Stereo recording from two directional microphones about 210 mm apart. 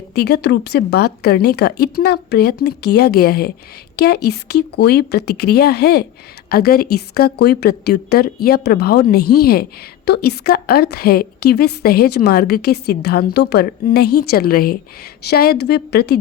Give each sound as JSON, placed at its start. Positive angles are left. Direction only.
{"t": 0.1, "sound": "a woman's voice", "side_deg": 50}